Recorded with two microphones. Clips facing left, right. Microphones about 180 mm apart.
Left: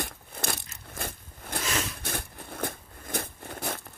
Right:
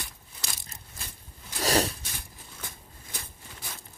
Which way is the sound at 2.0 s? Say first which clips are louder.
Left 10 dB; 60° left (ahead or behind).